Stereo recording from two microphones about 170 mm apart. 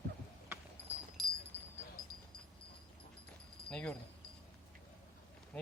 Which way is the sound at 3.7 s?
5° left (ahead or behind).